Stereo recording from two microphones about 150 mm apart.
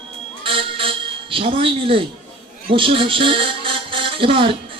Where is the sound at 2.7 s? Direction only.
35° right (ahead or behind).